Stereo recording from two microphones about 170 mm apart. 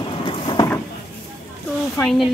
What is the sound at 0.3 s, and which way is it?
Vehicle, 25° left (ahead or behind).